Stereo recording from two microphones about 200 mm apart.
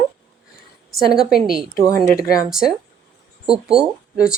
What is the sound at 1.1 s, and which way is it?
Speech, centre (ahead or behind).